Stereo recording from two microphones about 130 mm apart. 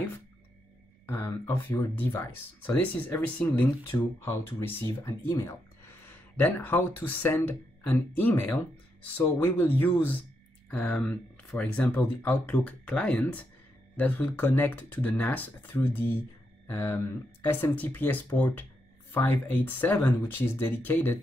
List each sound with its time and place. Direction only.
1.0 s speech: 20° left (ahead or behind)
6.3 s speech: 15° left (ahead or behind)